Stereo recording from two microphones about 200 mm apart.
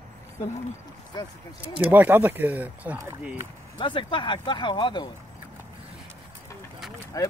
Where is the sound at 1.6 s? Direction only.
10° right (ahead or behind).